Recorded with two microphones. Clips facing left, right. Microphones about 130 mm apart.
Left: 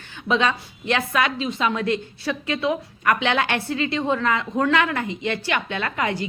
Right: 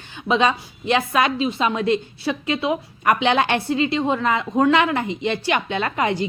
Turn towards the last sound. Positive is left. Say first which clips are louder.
# right 3 dB
turn(degrees=-25)  # may be behind; listen again after turning